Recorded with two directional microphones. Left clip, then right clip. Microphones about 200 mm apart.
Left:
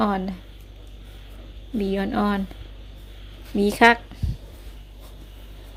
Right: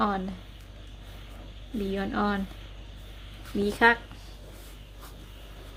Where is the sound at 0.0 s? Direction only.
25° left (ahead or behind).